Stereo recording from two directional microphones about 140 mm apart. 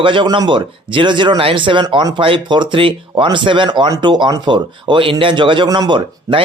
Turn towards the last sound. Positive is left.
turn(degrees=-35)  # may be behind; listen again after turning